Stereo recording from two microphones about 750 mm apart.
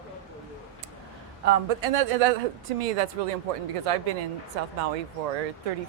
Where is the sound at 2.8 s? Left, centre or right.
Right.